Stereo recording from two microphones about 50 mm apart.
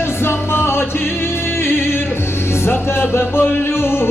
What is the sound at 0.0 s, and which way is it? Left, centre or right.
Music, left.